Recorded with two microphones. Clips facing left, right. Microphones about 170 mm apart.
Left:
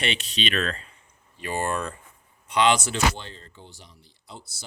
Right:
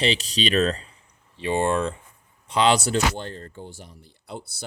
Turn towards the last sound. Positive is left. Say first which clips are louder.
# right 8 dB
turn(degrees=-55)  # may be behind; listen again after turning